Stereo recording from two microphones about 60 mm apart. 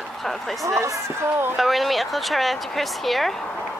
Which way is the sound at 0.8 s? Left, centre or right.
Right.